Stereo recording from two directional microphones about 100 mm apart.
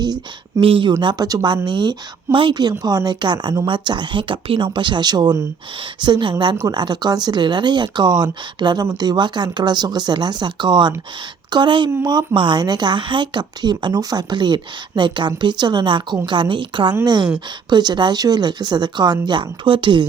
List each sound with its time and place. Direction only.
0.6 s speech: 60° right (ahead or behind)
1.0 s speech: 40° right (ahead or behind)
3.7 s speech: 50° right (ahead or behind)